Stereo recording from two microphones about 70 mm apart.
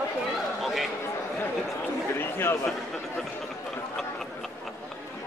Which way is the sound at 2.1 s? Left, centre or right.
Left.